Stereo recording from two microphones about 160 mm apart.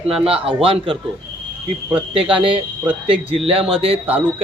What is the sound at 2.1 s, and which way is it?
Speech, 35° right (ahead or behind).